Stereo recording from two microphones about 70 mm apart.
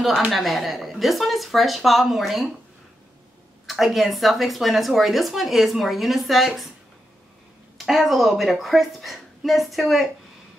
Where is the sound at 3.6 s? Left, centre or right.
Centre.